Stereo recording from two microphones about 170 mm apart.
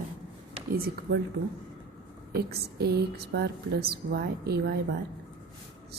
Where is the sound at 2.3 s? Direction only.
70° right (ahead or behind).